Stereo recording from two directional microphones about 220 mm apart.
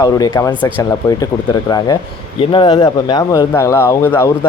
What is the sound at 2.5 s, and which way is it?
Speech, 20° left (ahead or behind).